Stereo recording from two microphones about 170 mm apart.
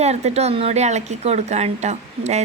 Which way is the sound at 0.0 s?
40° right (ahead or behind).